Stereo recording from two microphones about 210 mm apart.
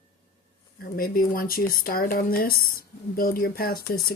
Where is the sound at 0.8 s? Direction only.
45° left (ahead or behind).